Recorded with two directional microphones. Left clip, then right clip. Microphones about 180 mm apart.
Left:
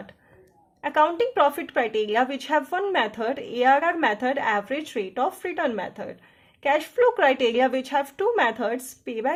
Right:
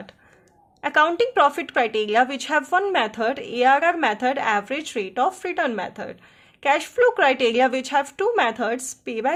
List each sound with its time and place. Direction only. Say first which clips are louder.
0.8 s a woman's voice: right 2 dB; 35° right (ahead or behind)